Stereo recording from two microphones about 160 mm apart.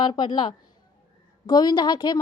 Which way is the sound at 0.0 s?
25° left (ahead or behind).